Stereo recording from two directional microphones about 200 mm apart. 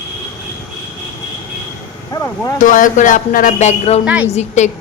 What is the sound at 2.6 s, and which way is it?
Speech, 40° left (ahead or behind).